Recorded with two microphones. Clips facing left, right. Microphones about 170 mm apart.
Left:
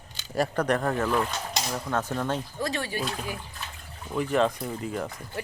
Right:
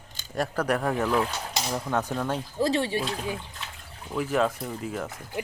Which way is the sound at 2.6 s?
30° right (ahead or behind).